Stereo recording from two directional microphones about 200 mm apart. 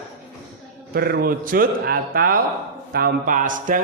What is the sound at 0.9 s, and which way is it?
A man's voice, 50° right (ahead or behind).